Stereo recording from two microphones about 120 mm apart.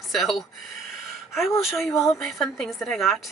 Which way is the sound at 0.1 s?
Centre (ahead or behind).